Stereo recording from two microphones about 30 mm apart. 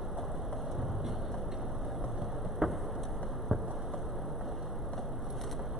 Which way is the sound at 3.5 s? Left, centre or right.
Centre.